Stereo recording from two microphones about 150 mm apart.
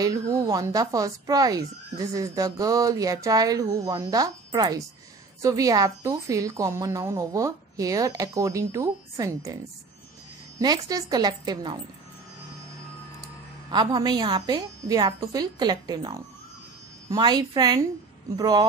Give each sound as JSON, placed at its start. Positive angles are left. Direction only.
{"t": 0.0, "sound": "speech", "side_deg": -20}
{"t": 10.9, "sound": "speech", "side_deg": -25}
{"t": 13.2, "sound": "a woman's voice", "side_deg": -30}